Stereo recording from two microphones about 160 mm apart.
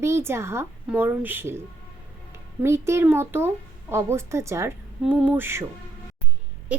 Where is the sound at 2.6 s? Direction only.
15° right (ahead or behind).